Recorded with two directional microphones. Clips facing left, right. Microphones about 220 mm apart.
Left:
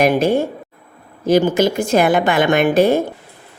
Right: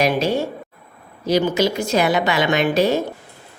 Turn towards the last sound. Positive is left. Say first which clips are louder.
# left 4 dB
turn(degrees=50)  # may be behind; listen again after turning